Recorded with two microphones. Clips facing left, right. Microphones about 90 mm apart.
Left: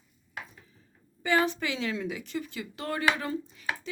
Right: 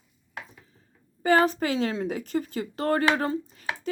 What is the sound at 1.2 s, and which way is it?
A woman's voice, 45° right (ahead or behind).